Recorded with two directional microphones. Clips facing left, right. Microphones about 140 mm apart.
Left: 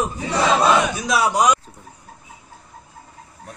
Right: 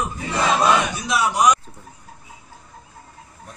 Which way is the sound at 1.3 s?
30° left (ahead or behind).